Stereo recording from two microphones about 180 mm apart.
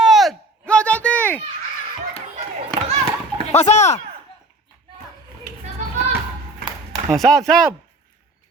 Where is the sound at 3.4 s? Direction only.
35° left (ahead or behind).